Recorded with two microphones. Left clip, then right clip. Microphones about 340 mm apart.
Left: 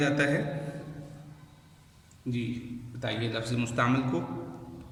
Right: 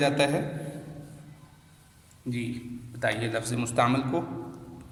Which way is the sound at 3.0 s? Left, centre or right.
Centre.